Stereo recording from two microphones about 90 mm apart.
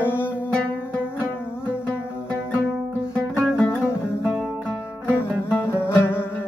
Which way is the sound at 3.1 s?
10° left (ahead or behind).